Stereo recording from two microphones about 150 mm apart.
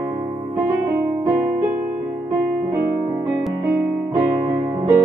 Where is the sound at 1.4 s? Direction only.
60° right (ahead or behind).